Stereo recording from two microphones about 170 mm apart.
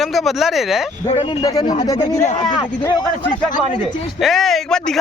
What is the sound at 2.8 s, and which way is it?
Speech, 25° left (ahead or behind).